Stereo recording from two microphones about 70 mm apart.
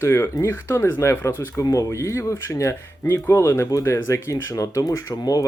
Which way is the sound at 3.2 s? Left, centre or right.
Left.